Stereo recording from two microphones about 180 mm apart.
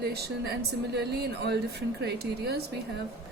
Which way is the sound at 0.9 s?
65° right (ahead or behind).